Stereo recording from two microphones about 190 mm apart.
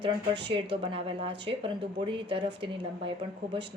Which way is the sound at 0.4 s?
25° right (ahead or behind).